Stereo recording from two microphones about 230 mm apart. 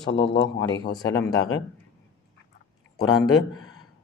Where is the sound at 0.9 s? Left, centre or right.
Centre.